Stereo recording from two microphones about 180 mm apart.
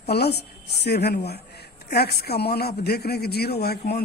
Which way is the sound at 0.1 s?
65° left (ahead or behind).